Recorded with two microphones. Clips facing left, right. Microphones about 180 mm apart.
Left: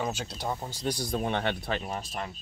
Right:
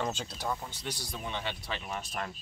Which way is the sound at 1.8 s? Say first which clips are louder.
Left 3 dB; 35° left (ahead or behind).